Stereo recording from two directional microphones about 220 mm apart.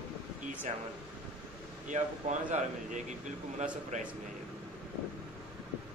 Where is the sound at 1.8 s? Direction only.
35° right (ahead or behind).